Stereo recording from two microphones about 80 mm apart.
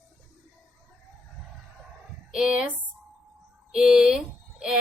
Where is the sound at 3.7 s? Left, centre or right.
Centre.